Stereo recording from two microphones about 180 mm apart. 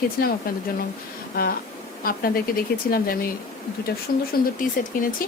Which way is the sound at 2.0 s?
55° left (ahead or behind).